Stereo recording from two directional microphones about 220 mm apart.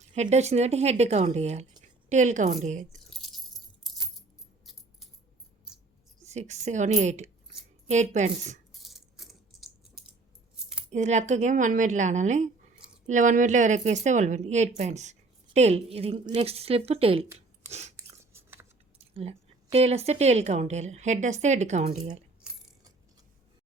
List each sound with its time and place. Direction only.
0.1 s a woman's voice: 30° right (ahead or behind)
3.1 s keys jangling: centre (ahead or behind)
4.6 s a sound: centre (ahead or behind)
6.2 s a woman's voice: 30° right (ahead or behind)
8.7 s a sound: centre (ahead or behind)
10.9 s a woman's voice: 30° right (ahead or behind)
17.7 s chewing: 30° right (ahead or behind)
18.2 s chewing: 10° right (ahead or behind)
18.9 s a woman's voice: 25° right (ahead or behind)